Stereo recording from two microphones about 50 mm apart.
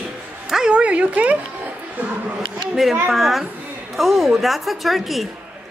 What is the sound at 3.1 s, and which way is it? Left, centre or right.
A woman's voice, centre.